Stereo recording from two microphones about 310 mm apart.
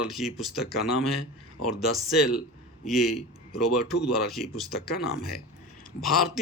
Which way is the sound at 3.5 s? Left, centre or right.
Left.